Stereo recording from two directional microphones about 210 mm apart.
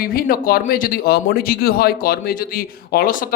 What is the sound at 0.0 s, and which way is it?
Speech, 45° left (ahead or behind).